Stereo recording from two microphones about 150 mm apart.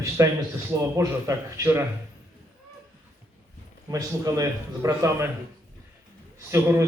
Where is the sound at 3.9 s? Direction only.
25° right (ahead or behind).